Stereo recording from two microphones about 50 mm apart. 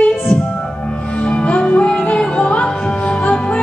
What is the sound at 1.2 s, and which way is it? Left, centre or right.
Music, left.